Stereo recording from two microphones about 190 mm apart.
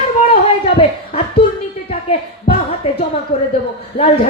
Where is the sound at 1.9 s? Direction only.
30° left (ahead or behind).